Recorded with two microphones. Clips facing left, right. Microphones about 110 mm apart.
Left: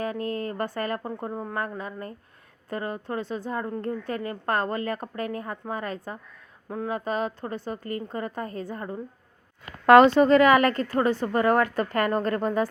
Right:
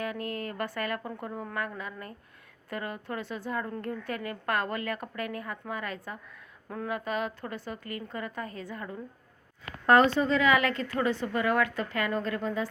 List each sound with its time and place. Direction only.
0.0 s a woman's voice: 30° left (ahead or behind)
6.7 s speech: 20° left (ahead or behind)
6.9 s a woman's voice: 35° left (ahead or behind)
9.8 s speech: 90° left
10.2 s a woman's voice: 60° left (ahead or behind)